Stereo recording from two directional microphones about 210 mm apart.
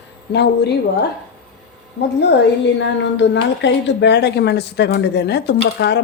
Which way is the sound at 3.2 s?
55° left (ahead or behind).